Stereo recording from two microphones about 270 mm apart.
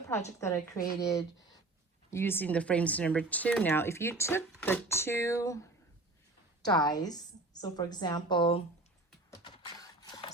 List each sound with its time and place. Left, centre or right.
0.3 s speech: centre
6.7 s speech: centre
9.4 s a sound: centre